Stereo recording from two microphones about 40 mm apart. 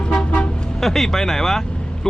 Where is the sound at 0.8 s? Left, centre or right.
Centre.